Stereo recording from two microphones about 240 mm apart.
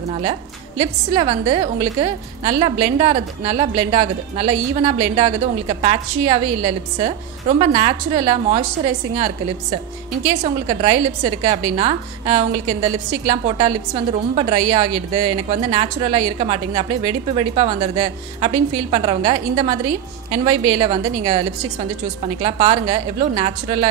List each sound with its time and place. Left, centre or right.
0.1 s a woman's voice: right